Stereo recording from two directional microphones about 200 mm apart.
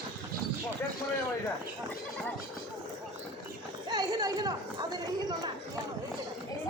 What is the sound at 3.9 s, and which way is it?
Chatter, 20° right (ahead or behind).